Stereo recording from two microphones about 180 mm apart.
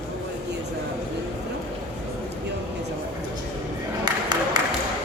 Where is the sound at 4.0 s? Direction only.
25° right (ahead or behind).